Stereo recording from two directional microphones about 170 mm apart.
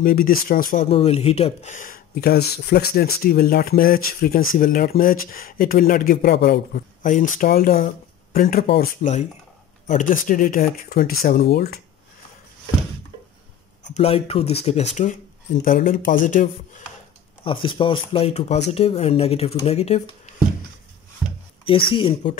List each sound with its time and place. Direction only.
0.0 s speech: 60° left (ahead or behind)
0.8 s speech: 35° left (ahead or behind)
2.1 s speech: 70° left (ahead or behind)
9.0 s speech: 45° left (ahead or behind); by 11.8 s 70° left (ahead or behind)
13.8 s speech: 40° left (ahead or behind)
15.6 s speech: 55° left (ahead or behind)
17.4 s speech: 30° left (ahead or behind)
21.6 s speech: 30° left (ahead or behind)